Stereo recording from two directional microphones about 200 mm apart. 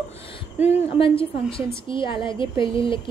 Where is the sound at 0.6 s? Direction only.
25° left (ahead or behind).